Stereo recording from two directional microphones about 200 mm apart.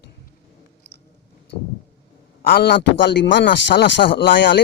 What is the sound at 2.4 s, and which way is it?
Speech, 50° left (ahead or behind).